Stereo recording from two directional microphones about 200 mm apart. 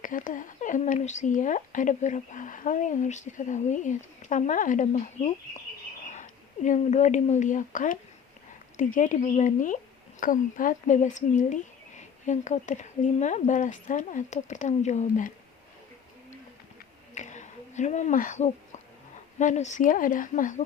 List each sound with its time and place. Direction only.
0.0 s a woman's voice: 40° left (ahead or behind)
17.2 s a sound: 35° left (ahead or behind)
19.4 s a woman's voice: 35° left (ahead or behind)